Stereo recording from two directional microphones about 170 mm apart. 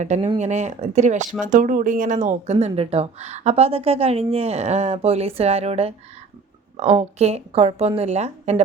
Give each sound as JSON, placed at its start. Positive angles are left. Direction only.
{"t": 0.0, "sound": "speech", "side_deg": -40}